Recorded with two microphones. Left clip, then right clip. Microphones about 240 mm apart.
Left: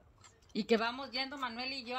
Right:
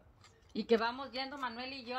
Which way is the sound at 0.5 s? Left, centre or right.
Left.